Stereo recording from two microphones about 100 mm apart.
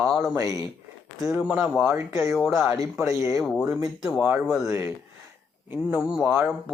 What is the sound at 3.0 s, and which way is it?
Speech, 30° right (ahead or behind).